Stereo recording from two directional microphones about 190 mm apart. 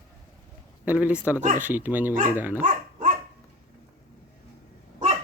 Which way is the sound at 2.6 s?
40° right (ahead or behind).